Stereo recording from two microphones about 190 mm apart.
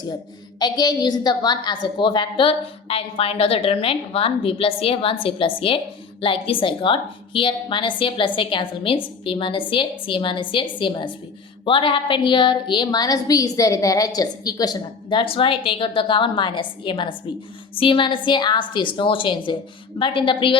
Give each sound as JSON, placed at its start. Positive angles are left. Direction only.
{"t": 0.6, "sound": "a woman's voice", "side_deg": 20}